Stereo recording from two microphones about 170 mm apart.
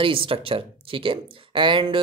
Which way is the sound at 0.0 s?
30° right (ahead or behind).